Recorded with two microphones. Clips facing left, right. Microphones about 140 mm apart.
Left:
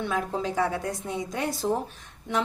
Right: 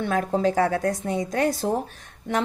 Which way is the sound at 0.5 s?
70° right (ahead or behind).